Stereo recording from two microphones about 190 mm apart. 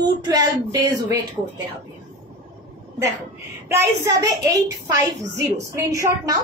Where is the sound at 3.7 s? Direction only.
15° right (ahead or behind).